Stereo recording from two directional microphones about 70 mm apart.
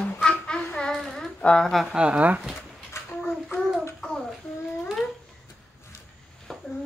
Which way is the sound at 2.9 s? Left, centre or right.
Left.